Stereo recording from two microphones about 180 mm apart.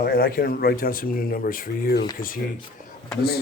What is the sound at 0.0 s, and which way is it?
Speech, 55° left (ahead or behind).